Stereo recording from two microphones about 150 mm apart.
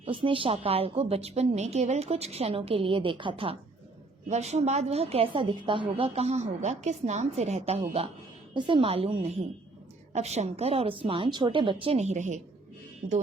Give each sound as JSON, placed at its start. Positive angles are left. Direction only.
{"t": 0.0, "sound": "a woman's voice", "side_deg": -35}
{"t": 4.3, "sound": "a woman's voice", "side_deg": -50}